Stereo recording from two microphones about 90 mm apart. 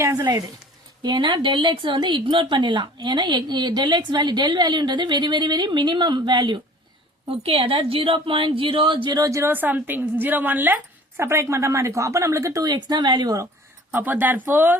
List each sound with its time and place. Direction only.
0.0 s speech: 40° right (ahead or behind)
1.0 s a woman's voice: 60° right (ahead or behind)
7.3 s a woman's voice: 90° right; by 9.2 s 60° right (ahead or behind)
9.2 s speech: 35° right (ahead or behind)
9.5 s a woman's voice: 20° right (ahead or behind)
11.2 s speech: 30° right (ahead or behind)
12.6 s a woman's voice: 50° right (ahead or behind)
13.9 s a woman's voice: 20° right (ahead or behind)